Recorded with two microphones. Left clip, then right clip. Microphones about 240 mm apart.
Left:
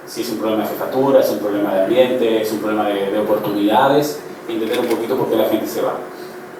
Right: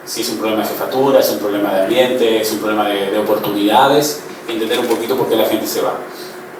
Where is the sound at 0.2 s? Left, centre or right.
Centre.